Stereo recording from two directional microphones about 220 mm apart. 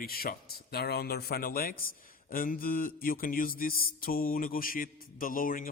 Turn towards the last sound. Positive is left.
turn(degrees=40)  # may be behind; listen again after turning